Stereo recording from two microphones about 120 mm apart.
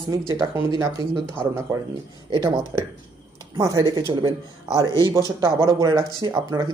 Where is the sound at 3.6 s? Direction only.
30° right (ahead or behind).